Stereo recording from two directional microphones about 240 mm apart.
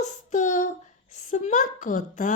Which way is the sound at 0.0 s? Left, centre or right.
Left.